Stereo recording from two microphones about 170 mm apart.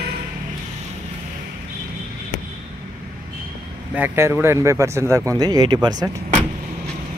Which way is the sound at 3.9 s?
15° right (ahead or behind).